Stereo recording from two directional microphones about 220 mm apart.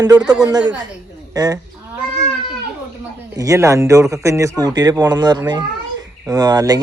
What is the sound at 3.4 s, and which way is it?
Speech, 15° right (ahead or behind).